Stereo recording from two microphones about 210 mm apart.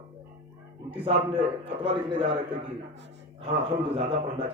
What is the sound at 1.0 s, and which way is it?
A man's voice, 25° right (ahead or behind).